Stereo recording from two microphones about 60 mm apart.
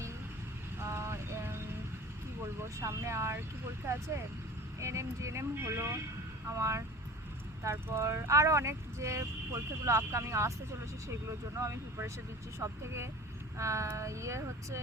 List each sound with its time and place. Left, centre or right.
0.8 s vehicle: right
2.6 s speech: right
4.8 s speech: right
12.5 s speech: right